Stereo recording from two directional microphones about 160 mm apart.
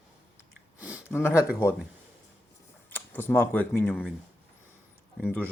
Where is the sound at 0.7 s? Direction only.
10° right (ahead or behind).